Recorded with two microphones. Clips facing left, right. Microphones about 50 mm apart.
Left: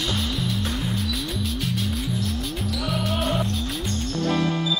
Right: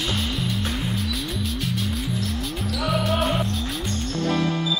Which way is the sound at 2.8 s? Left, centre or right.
Centre.